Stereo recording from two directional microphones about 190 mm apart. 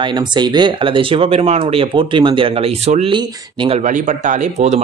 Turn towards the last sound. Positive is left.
turn(degrees=-35)  # may be behind; listen again after turning